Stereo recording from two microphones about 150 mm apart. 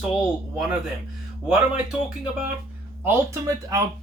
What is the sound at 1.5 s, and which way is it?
Speech, 5° right (ahead or behind).